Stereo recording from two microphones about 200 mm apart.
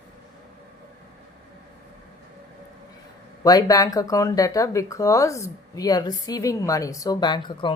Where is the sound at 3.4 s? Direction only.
20° left (ahead or behind).